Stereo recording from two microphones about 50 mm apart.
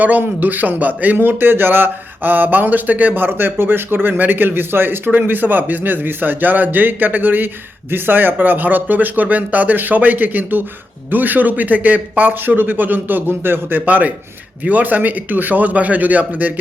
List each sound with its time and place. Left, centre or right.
0.0 s a man's voice: right
3.2 s a man's voice: right